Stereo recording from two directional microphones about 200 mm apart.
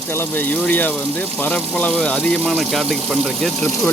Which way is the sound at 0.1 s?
10° left (ahead or behind).